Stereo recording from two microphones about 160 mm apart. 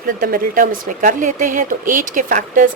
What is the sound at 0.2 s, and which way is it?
Speech, 60° right (ahead or behind).